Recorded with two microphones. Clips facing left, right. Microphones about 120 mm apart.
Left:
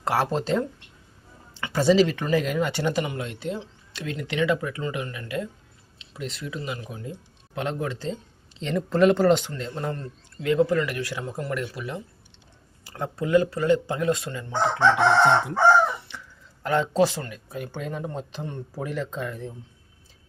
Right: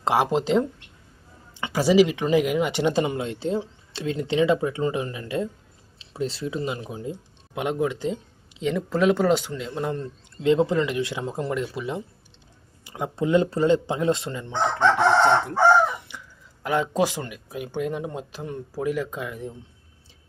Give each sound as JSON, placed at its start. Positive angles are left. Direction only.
{"t": 0.0, "sound": "speech", "side_deg": -15}
{"t": 2.9, "sound": "speech", "side_deg": -30}
{"t": 14.8, "sound": "chicken", "side_deg": 5}
{"t": 16.1, "sound": "a sound", "side_deg": -15}
{"t": 16.6, "sound": "speech", "side_deg": -10}